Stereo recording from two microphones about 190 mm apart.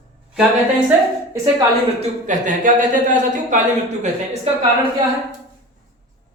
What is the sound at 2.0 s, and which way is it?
Speech, 40° right (ahead or behind).